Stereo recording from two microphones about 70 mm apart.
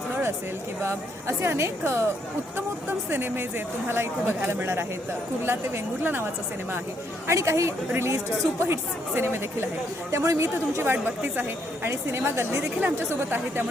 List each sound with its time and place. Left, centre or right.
0.8 s speech: right
3.1 s a woman's voice: right
7.3 s speech: right